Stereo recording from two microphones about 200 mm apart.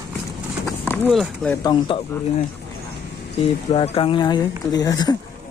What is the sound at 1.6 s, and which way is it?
Speech, 25° left (ahead or behind).